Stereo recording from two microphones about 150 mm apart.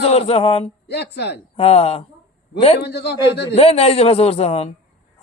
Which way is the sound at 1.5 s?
40° left (ahead or behind).